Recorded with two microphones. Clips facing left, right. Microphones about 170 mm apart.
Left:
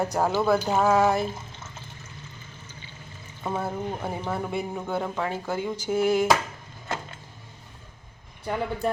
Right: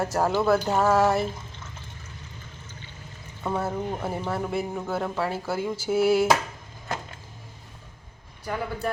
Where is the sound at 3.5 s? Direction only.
Centre (ahead or behind).